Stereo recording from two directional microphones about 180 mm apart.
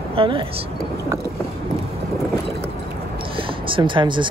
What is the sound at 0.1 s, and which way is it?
Speech, 30° right (ahead or behind).